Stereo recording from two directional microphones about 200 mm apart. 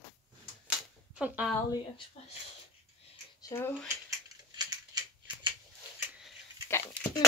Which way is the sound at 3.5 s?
10° left (ahead or behind).